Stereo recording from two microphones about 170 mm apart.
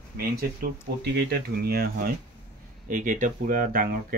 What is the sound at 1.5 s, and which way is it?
Speech, 65° right (ahead or behind).